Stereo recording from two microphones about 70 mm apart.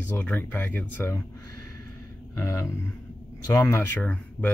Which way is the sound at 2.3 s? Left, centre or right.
Left.